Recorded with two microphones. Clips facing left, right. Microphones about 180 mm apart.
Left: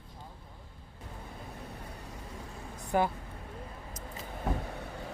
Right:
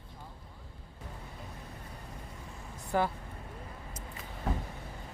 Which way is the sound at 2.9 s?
20° left (ahead or behind).